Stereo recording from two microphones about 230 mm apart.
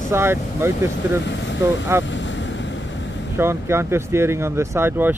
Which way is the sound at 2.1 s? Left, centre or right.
Left.